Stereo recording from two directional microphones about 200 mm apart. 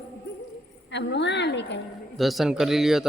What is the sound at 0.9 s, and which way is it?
Speech, 60° left (ahead or behind).